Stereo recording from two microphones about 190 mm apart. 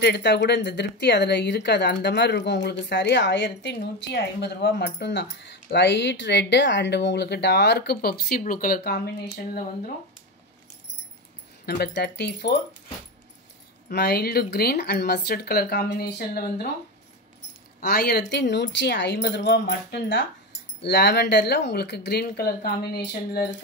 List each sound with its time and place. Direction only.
0.0 s speech: 60° left (ahead or behind)
11.6 s speech: 60° left (ahead or behind)
13.8 s speech: 55° left (ahead or behind)
17.7 s speech: 55° left (ahead or behind)